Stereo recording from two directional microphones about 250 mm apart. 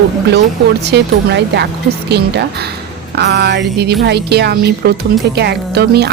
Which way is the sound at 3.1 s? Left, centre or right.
Right.